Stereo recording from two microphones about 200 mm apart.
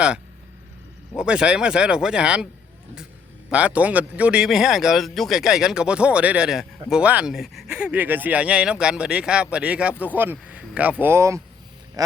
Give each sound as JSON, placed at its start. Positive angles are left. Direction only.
{"t": 1.1, "sound": "speech", "side_deg": -5}
{"t": 3.5, "sound": "speech", "side_deg": -5}
{"t": 10.3, "sound": "a sound", "side_deg": -5}
{"t": 11.0, "sound": "speech", "side_deg": -15}